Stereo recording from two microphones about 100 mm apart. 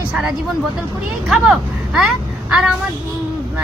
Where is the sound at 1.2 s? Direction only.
5° right (ahead or behind).